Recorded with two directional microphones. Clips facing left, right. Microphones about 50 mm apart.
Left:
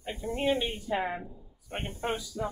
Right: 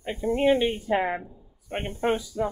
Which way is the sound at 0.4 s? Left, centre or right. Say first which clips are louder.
Right 7 dB; right.